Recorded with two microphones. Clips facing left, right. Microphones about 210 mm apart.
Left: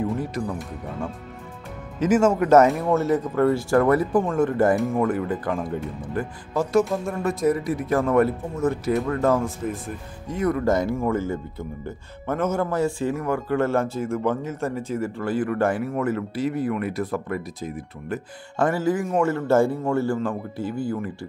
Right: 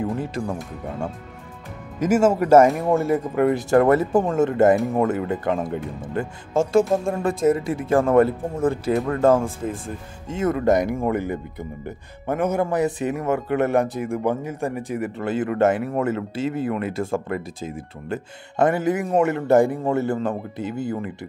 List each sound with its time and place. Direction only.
0.2 s speech: 25° right (ahead or behind)
2.0 s speech: 10° right (ahead or behind)